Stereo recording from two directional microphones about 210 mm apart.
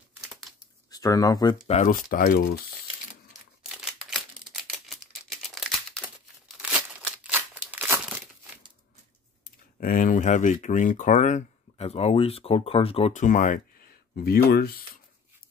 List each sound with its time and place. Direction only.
0.3 s crumpling: centre (ahead or behind)
0.9 s speech: 15° left (ahead or behind)
1.7 s speech: 35° left (ahead or behind)
3.6 s a sound: centre (ahead or behind)
5.4 s crumpling: centre (ahead or behind)
9.8 s speech: 40° left (ahead or behind)